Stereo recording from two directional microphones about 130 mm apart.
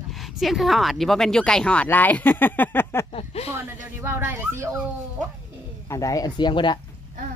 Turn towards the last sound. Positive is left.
turn(degrees=35)  # may be behind; listen again after turning